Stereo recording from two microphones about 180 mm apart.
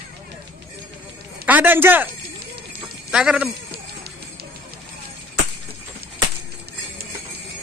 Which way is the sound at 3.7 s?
60° right (ahead or behind).